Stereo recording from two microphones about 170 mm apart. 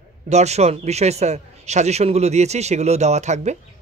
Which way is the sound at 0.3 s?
40° right (ahead or behind).